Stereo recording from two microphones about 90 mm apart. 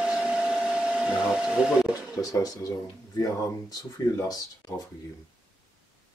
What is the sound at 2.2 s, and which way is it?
Speech, 40° left (ahead or behind).